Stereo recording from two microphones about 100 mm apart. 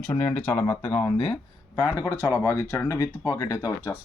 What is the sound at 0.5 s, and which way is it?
Speech, 40° left (ahead or behind).